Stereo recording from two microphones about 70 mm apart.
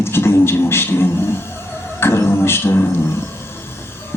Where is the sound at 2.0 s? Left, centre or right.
Left.